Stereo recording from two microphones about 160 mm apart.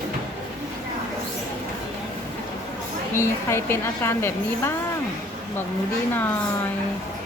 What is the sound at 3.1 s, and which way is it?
A woman's voice, 15° left (ahead or behind).